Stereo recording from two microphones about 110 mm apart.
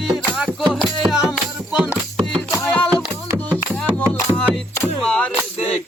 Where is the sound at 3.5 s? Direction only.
15° right (ahead or behind).